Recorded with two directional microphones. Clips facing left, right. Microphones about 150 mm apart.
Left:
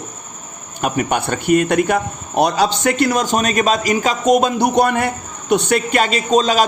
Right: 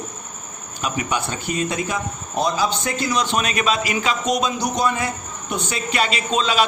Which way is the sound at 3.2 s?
45° left (ahead or behind).